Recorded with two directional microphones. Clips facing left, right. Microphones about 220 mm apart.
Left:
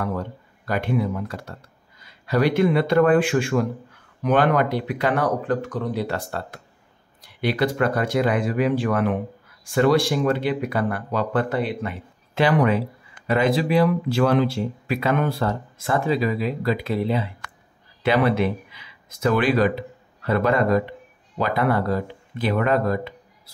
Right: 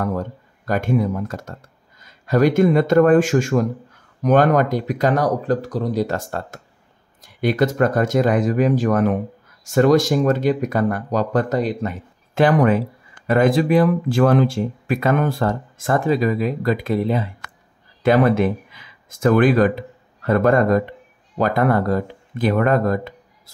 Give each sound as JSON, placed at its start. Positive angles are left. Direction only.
{"t": 0.0, "sound": "speech", "side_deg": -45}